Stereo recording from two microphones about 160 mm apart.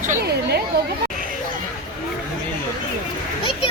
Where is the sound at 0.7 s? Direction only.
80° right.